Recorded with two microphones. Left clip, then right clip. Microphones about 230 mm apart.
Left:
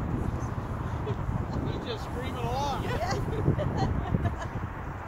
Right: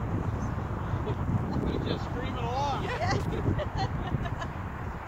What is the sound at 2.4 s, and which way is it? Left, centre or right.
Vehicle, left.